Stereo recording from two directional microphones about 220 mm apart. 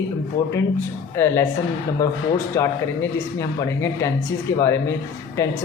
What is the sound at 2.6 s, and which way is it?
Speech, 15° left (ahead or behind).